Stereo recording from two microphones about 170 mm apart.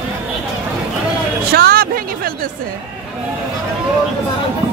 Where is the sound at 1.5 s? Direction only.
65° right (ahead or behind).